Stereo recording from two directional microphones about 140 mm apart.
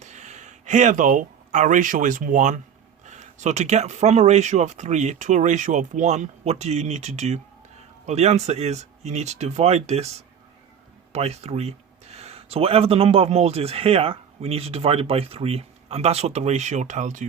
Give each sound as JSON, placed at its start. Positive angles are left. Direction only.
{"t": 0.0, "sound": "speech", "side_deg": -55}